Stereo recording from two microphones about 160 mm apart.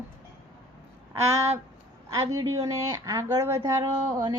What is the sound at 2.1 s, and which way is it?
Speech, 20° right (ahead or behind).